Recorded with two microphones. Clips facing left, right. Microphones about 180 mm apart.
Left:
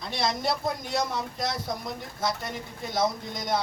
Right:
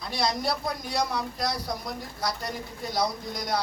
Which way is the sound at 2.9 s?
25° left (ahead or behind).